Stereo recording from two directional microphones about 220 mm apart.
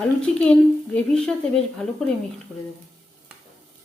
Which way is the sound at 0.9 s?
5° left (ahead or behind).